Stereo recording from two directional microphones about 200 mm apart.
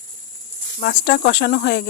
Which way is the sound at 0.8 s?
50° left (ahead or behind).